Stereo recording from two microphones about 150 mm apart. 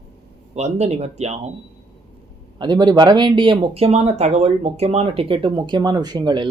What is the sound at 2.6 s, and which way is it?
Speech, 30° right (ahead or behind).